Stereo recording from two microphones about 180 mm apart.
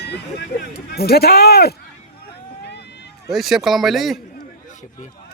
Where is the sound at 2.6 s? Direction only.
70° left (ahead or behind).